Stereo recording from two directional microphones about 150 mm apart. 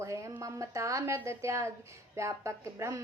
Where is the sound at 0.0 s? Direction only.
20° right (ahead or behind).